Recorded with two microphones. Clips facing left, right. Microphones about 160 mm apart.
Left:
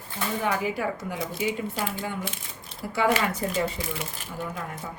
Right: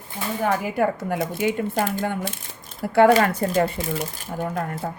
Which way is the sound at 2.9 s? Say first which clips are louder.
Right 9 dB; 60° right (ahead or behind).